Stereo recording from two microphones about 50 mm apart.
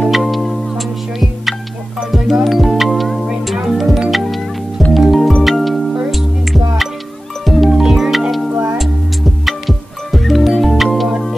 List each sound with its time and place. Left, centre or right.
0.1 s music: centre
9.5 s music: centre